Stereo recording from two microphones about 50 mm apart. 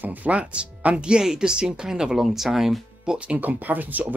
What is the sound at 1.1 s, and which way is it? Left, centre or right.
Speech, centre.